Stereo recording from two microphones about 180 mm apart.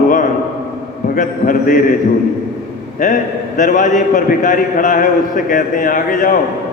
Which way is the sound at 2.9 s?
45° left (ahead or behind).